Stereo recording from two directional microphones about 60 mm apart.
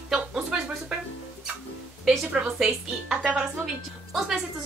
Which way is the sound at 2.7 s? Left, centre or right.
Centre.